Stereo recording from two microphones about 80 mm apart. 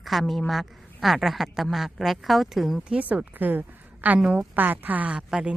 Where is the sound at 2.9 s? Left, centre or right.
Centre.